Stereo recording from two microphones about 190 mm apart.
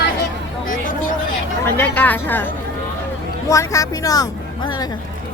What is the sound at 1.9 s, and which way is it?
Speech, 10° left (ahead or behind).